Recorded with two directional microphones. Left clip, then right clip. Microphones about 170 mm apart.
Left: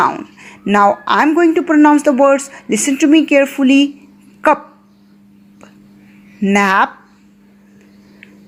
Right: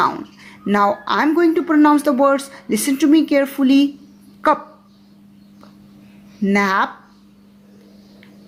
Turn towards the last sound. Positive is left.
turn(degrees=20)  # may be behind; listen again after turning